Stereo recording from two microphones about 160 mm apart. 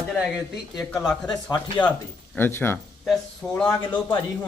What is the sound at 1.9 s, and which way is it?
Speech, 10° left (ahead or behind).